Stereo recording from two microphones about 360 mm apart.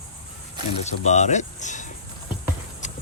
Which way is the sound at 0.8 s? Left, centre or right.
Centre.